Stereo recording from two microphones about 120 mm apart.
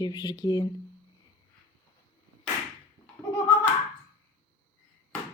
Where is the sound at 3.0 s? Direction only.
40° left (ahead or behind).